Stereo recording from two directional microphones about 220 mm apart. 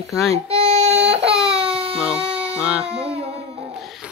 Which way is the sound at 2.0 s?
5° right (ahead or behind).